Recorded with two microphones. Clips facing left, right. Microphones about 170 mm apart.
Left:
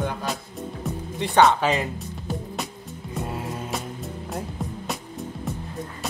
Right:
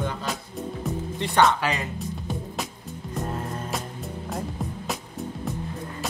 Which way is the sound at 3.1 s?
5° left (ahead or behind).